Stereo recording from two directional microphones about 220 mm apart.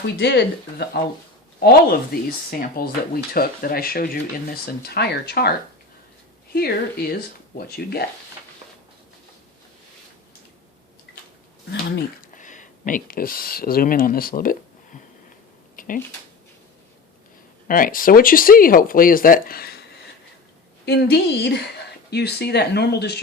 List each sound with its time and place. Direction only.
0.2 s speech: 45° left (ahead or behind)
11.7 s speech: 50° left (ahead or behind)
12.3 s speech: 35° left (ahead or behind)
15.7 s a sound: 40° left (ahead or behind)
17.7 s speech: 40° left (ahead or behind)
20.8 s speech: 50° left (ahead or behind)